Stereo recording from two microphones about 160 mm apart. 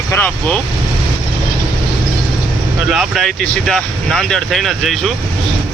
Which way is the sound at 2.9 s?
Centre (ahead or behind).